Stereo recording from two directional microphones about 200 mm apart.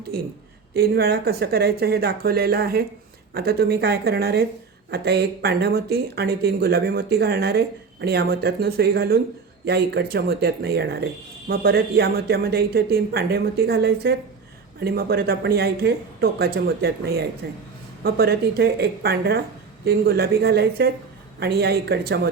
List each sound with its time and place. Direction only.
0.1 s speech: 50° right (ahead or behind)